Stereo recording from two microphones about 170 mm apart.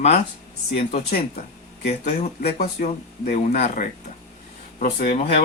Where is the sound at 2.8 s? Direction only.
45° left (ahead or behind).